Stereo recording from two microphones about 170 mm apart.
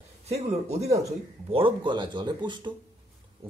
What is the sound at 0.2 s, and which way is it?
Speech, 40° right (ahead or behind).